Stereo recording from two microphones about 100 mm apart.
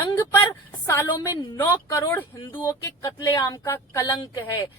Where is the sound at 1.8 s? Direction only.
35° left (ahead or behind).